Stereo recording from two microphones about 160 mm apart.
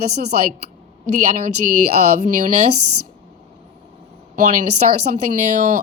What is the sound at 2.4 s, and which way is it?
Speech, 45° right (ahead or behind).